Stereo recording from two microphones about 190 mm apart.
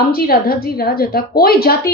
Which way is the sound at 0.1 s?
50° left (ahead or behind).